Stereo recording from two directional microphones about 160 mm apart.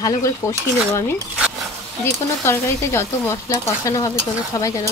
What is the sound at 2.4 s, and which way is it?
Speech, 15° left (ahead or behind).